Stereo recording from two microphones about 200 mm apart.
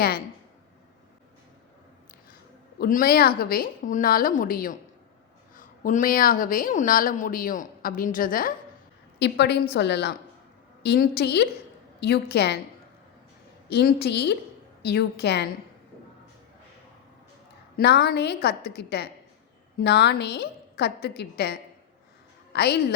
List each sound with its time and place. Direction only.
2.7 s a woman's voice: 50° left (ahead or behind)
9.1 s a woman's voice: 55° left (ahead or behind)
13.7 s a woman's voice: 55° left (ahead or behind)
17.7 s a woman's voice: 55° left (ahead or behind)
22.5 s a woman's voice: 55° left (ahead or behind)